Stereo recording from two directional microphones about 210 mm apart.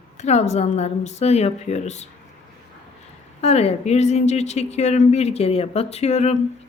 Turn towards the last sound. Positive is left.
turn(degrees=30)  # may be behind; listen again after turning